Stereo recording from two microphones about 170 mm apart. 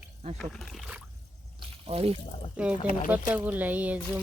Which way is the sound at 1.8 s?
35° right (ahead or behind).